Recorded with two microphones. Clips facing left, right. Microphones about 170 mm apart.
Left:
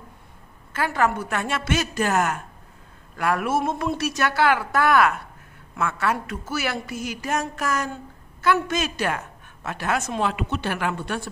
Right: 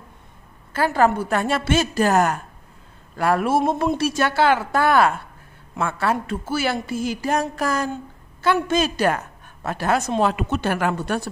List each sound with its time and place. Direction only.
0.7 s a woman's voice: 35° right (ahead or behind)
7.9 s a sound: 30° right (ahead or behind)
8.6 s a woman's voice: 35° right (ahead or behind)